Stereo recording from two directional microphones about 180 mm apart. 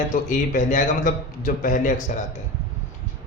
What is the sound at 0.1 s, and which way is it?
A man's voice, 45° left (ahead or behind).